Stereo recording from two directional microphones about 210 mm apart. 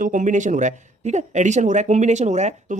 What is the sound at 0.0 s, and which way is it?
Speech, 40° right (ahead or behind).